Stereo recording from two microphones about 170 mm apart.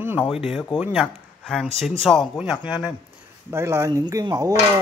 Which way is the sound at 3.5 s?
15° right (ahead or behind).